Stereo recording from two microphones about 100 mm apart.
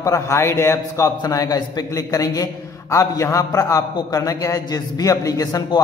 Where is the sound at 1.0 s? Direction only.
40° left (ahead or behind).